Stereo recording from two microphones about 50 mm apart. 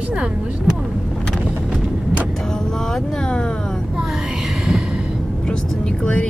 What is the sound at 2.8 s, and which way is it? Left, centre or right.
Speech, centre.